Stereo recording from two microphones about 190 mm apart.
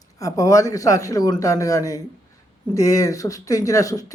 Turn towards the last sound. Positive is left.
turn(degrees=20)  # may be behind; listen again after turning